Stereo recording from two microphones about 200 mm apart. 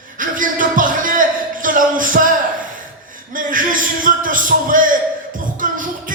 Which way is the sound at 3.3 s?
45° right (ahead or behind).